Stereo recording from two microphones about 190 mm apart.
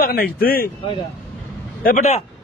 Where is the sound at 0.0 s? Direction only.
50° left (ahead or behind).